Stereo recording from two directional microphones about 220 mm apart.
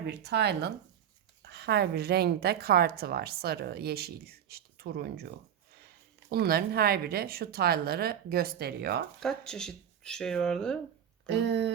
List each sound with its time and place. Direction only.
0.1 s a woman's voice: 50° right (ahead or behind)
6.3 s a woman's voice: 45° right (ahead or behind)
9.2 s speech: 5° left (ahead or behind)
11.3 s a woman's voice: 50° right (ahead or behind)